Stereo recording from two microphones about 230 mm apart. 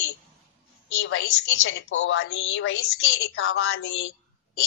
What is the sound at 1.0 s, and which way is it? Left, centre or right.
Speech, left.